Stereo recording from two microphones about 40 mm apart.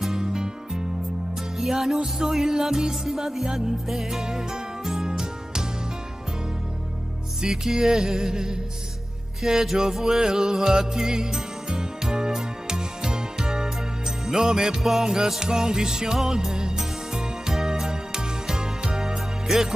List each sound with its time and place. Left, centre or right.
0.0 s music: centre
7.4 s music: centre
14.8 s music: centre